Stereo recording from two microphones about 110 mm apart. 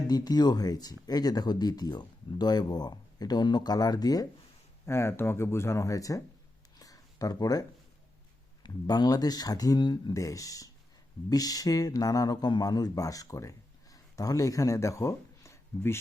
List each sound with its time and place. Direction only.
0.1 s speech: 40° left (ahead or behind)
4.9 s speech: 25° left (ahead or behind)
6.7 s a sound: 35° left (ahead or behind)
8.6 s a man's voice: 40° left (ahead or behind)